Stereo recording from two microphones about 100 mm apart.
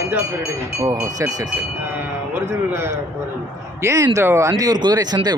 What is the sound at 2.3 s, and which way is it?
A man's voice, 25° right (ahead or behind).